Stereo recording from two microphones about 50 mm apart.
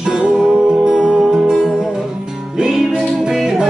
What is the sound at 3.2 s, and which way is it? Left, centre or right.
Music, centre.